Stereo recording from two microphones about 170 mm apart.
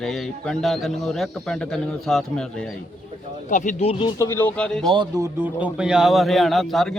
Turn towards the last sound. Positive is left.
turn(degrees=0)  # may be behind; listen again after turning